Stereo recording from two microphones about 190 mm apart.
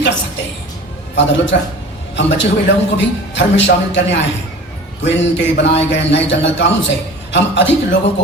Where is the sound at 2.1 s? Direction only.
70° left (ahead or behind).